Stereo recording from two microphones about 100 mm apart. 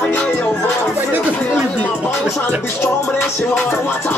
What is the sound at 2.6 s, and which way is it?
Music, 25° left (ahead or behind).